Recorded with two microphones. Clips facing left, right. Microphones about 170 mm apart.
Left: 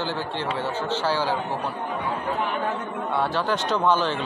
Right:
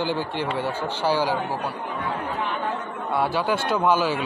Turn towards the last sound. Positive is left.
turn(degrees=-10)  # may be behind; listen again after turning